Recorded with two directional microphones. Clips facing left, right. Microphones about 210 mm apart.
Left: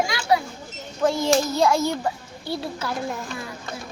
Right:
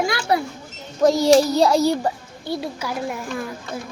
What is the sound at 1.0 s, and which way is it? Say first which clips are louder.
A child's voice: right 6 dB; 40° right (ahead or behind).